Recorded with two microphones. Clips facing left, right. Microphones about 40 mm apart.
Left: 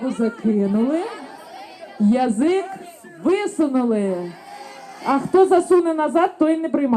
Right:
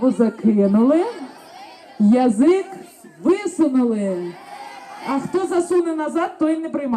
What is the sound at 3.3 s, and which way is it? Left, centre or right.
Speech, centre.